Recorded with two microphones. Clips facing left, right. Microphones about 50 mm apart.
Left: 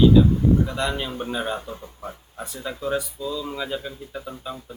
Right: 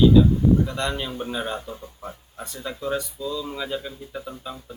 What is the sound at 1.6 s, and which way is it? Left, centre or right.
Speech, left.